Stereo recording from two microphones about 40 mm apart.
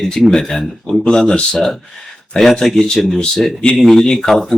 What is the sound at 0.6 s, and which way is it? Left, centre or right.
Speech, centre.